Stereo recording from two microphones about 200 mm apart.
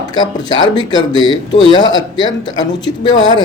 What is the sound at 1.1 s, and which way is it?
Speech, 25° right (ahead or behind).